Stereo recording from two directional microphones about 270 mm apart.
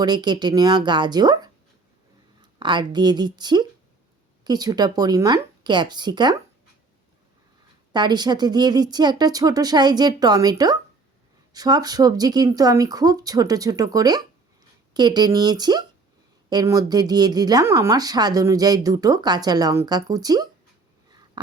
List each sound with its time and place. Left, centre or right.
0.0 s speech: centre
7.9 s speech: centre
21.1 s a sound: centre